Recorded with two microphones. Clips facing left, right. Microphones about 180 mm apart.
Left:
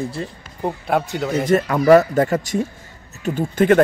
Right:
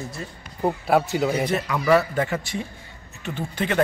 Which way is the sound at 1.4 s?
50° left (ahead or behind).